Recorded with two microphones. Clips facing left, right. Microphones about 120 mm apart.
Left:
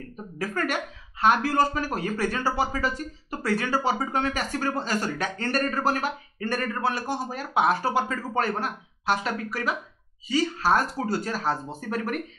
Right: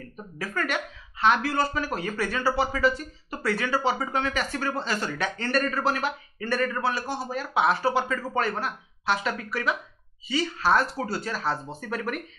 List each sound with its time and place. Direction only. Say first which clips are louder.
0.4 s speech: left 1 dB; 40° left (ahead or behind)